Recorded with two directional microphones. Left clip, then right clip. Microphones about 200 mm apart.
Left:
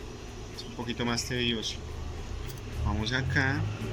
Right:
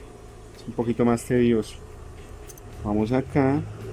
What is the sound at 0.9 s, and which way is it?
Speech, 50° right (ahead or behind).